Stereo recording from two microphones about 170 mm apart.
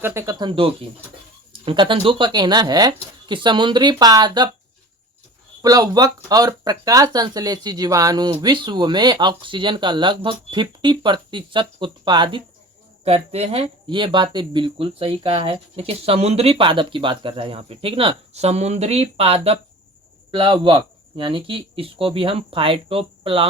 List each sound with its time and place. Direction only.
0.0 s speech: 15° right (ahead or behind)
5.6 s speech: 20° right (ahead or behind)